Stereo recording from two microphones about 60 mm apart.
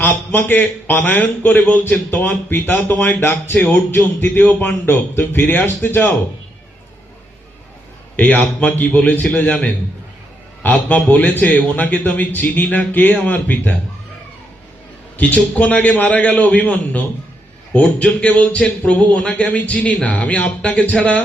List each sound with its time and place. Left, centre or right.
0.0 s a man's voice: left
8.1 s a man's voice: left
15.2 s a man's voice: left